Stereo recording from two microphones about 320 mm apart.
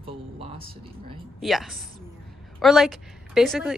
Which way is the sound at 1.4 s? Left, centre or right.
Centre.